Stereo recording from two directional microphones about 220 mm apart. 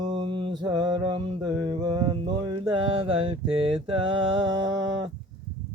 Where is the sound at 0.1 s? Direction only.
25° right (ahead or behind).